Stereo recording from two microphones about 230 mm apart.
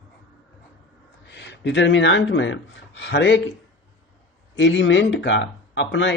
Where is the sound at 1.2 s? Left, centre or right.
Left.